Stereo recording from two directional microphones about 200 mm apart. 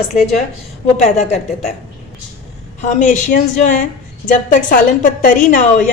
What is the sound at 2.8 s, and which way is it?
A woman's voice, 40° left (ahead or behind).